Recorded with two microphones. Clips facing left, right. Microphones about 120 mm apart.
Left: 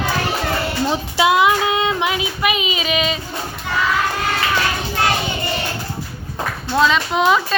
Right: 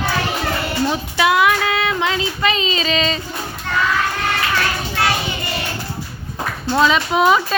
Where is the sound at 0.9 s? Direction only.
20° left (ahead or behind).